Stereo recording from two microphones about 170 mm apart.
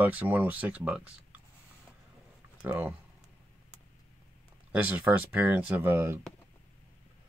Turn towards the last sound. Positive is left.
turn(degrees=-15)  # may be behind; listen again after turning